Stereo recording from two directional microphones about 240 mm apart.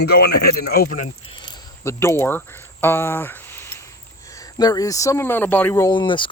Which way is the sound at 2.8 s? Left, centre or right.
Centre.